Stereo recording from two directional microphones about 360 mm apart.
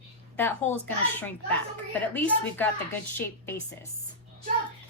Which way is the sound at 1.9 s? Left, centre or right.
Centre.